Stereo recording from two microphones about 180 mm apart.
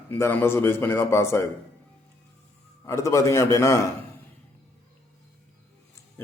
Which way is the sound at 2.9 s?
15° left (ahead or behind).